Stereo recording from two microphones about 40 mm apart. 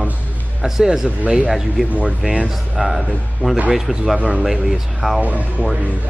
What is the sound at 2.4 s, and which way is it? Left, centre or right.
Speech, centre.